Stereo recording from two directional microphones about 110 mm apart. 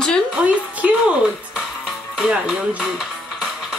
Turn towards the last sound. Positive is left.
turn(degrees=-5)  # may be behind; listen again after turning